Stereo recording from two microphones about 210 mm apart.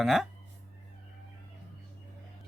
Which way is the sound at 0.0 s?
Centre (ahead or behind).